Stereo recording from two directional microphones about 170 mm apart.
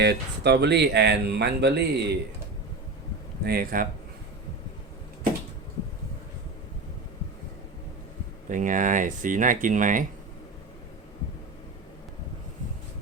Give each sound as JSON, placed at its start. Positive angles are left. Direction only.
{"t": 0.0, "sound": "speech", "side_deg": -75}
{"t": 3.4, "sound": "speech", "side_deg": -60}
{"t": 8.4, "sound": "speech", "side_deg": -50}